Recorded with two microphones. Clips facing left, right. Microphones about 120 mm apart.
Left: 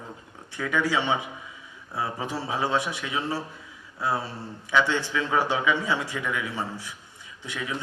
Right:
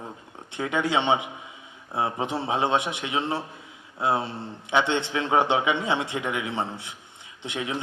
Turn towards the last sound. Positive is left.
turn(degrees=-25)  # may be behind; listen again after turning